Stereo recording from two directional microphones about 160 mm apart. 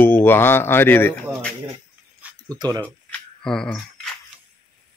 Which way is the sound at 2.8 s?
5° left (ahead or behind).